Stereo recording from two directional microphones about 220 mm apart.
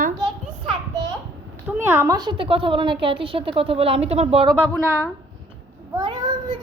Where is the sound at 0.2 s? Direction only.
20° right (ahead or behind).